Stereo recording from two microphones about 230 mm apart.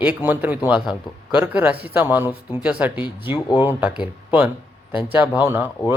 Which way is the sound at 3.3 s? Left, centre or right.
Centre.